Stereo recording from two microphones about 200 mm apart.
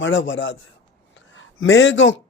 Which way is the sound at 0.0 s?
70° left (ahead or behind).